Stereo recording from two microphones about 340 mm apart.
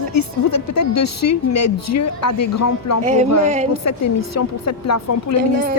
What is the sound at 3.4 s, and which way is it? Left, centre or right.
Speech, centre.